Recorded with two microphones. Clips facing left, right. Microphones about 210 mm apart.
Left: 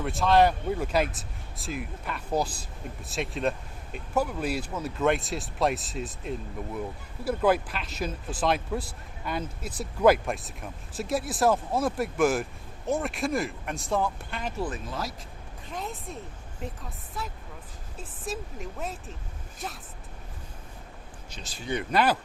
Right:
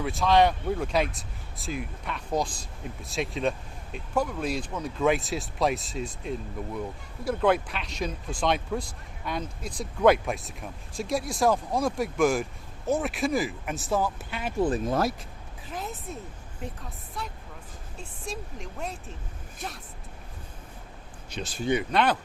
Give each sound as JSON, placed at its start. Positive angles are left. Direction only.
{"t": 0.0, "sound": "speech", "side_deg": 0}
{"t": 15.7, "sound": "speech", "side_deg": 0}
{"t": 17.2, "sound": "speech", "side_deg": 0}
{"t": 21.2, "sound": "speech", "side_deg": -65}
{"t": 21.8, "sound": "speech", "side_deg": 5}